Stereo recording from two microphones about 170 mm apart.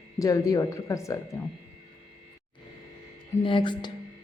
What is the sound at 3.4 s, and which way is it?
Speech, 30° left (ahead or behind).